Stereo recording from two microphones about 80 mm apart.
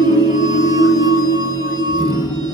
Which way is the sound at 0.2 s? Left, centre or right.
Right.